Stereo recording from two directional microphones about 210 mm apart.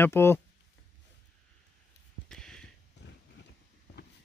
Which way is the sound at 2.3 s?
5° left (ahead or behind).